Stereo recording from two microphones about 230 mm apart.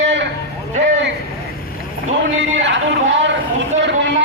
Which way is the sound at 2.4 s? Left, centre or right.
Right.